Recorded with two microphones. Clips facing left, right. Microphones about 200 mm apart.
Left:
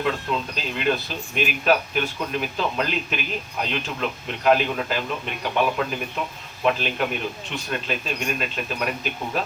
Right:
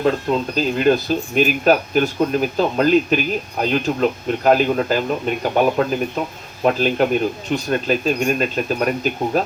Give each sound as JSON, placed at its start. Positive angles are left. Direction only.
{"t": 0.0, "sound": "speech", "side_deg": -40}